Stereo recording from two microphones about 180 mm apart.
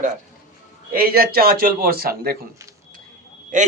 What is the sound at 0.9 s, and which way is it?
A man's voice, 55° right (ahead or behind).